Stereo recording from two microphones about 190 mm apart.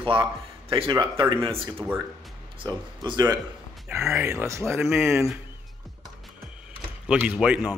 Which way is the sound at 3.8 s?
5° right (ahead or behind).